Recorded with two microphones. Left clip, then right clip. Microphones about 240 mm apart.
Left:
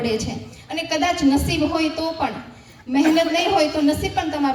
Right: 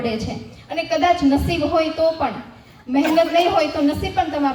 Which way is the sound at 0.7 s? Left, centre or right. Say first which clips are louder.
Right 4 dB; left.